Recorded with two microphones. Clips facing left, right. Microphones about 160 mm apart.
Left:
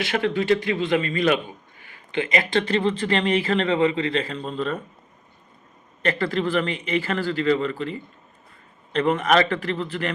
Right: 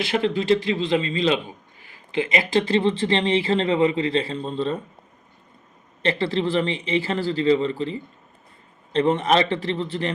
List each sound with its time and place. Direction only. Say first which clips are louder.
0.1 s speech: right 1 dB; 30° right (ahead or behind)
6.0 s a man's voice: right 1 dB; 30° right (ahead or behind)